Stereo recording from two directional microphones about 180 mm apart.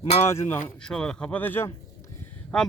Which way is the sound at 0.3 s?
15° left (ahead or behind).